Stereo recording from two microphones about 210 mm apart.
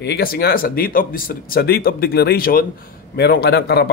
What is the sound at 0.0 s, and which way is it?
Speech, 50° left (ahead or behind).